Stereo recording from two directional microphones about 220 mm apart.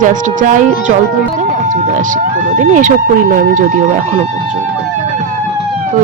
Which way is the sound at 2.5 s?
35° right (ahead or behind).